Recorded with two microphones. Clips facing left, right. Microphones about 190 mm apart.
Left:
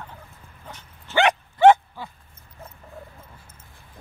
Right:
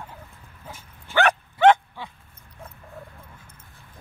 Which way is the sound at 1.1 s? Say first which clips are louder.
Left 1 dB; 10° right (ahead or behind).